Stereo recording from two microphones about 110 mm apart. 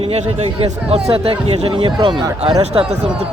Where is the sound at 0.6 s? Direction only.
65° right (ahead or behind); by 2.6 s 45° right (ahead or behind).